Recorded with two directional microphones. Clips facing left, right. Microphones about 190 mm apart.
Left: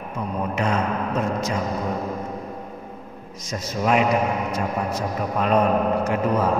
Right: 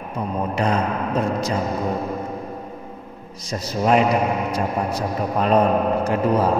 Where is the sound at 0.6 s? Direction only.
35° right (ahead or behind).